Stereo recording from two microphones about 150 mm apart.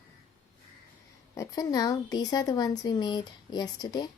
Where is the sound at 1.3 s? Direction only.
20° left (ahead or behind).